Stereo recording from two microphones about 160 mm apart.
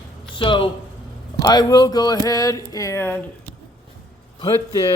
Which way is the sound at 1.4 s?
25° left (ahead or behind).